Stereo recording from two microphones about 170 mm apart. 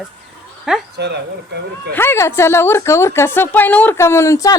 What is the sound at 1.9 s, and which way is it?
Speech, 15° left (ahead or behind).